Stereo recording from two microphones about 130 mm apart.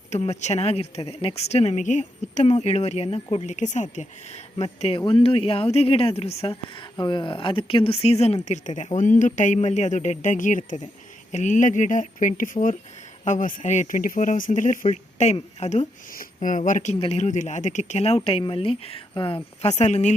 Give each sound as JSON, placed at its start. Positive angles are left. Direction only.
{"t": 0.1, "sound": "speech", "side_deg": 60}
{"t": 2.6, "sound": "speech", "side_deg": 55}
{"t": 3.5, "sound": "speech", "side_deg": 70}
{"t": 4.5, "sound": "speech", "side_deg": 50}
{"t": 6.9, "sound": "speech", "side_deg": 35}
{"t": 9.6, "sound": "speech", "side_deg": 60}
{"t": 13.2, "sound": "speech", "side_deg": 80}
{"t": 17.0, "sound": "speech", "side_deg": 55}
{"t": 19.6, "sound": "speech", "side_deg": 60}